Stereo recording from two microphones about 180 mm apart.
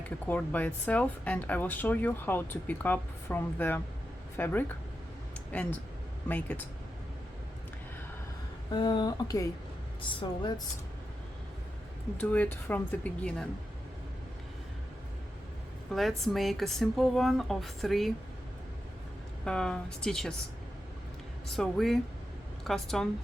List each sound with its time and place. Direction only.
0.3 s speech: 10° left (ahead or behind)
6.2 s speech: 10° left (ahead or behind)
8.7 s speech: 25° left (ahead or behind)
12.1 s speech: 10° left (ahead or behind)
15.9 s a woman's voice: centre (ahead or behind)
19.5 s a woman's voice: 5° left (ahead or behind)
21.5 s a woman's voice: centre (ahead or behind)